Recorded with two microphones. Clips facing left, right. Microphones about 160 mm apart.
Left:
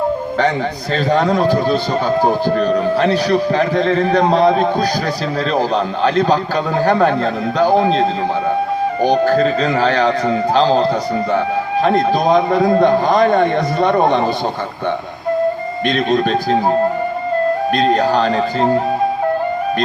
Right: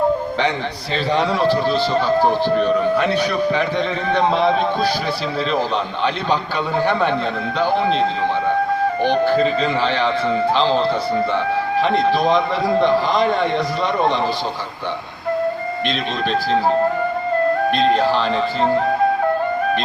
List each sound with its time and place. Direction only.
0.9 s a man's voice: 45° left (ahead or behind)
9.0 s a man's voice: 45° left (ahead or behind)
16.0 s a man's voice: 45° left (ahead or behind)
17.9 s a man's voice: 45° left (ahead or behind)